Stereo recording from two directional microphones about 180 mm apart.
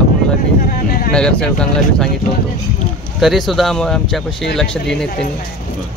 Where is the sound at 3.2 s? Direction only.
Centre (ahead or behind).